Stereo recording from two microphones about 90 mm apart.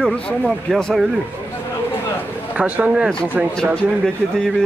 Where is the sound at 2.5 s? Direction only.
15° right (ahead or behind).